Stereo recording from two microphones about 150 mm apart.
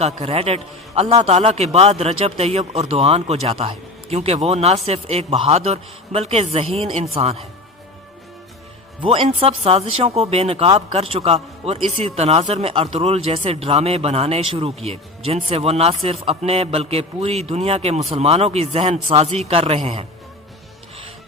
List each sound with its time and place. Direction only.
0.0 s a man's voice: 40° right (ahead or behind)
9.0 s speech: 35° right (ahead or behind)